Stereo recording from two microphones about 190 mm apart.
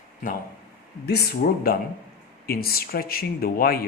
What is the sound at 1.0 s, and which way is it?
Speech, 55° left (ahead or behind).